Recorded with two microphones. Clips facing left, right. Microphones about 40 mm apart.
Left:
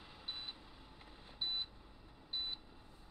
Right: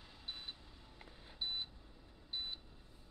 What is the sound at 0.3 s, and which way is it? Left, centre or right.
Vehicle, centre.